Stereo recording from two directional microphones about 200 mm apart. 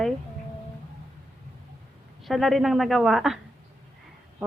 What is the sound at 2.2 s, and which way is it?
Speech, centre (ahead or behind).